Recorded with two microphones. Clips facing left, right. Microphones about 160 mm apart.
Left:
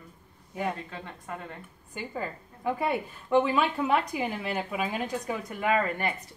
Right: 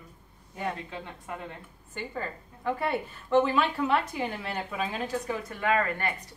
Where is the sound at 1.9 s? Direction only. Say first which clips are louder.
Left 1 dB; 10° left (ahead or behind).